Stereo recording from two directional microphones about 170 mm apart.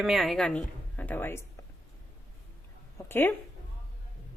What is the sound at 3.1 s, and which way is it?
Speech, 10° left (ahead or behind).